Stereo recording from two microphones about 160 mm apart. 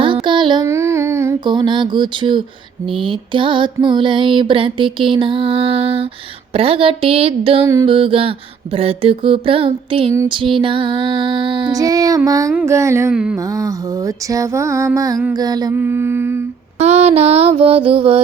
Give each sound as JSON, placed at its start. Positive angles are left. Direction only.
{"t": 0.0, "sound": "child singing", "side_deg": -30}
{"t": 0.6, "sound": "child singing", "side_deg": -15}
{"t": 1.5, "sound": "music", "side_deg": -30}
{"t": 2.8, "sound": "mantra", "side_deg": -30}
{"t": 13.3, "sound": "music", "side_deg": -20}
{"t": 15.7, "sound": "mantra", "side_deg": -15}
{"t": 16.7, "sound": "mantra", "side_deg": -40}